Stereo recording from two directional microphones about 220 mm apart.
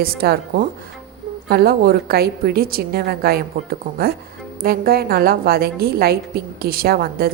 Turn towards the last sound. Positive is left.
turn(degrees=-45)  # may be behind; listen again after turning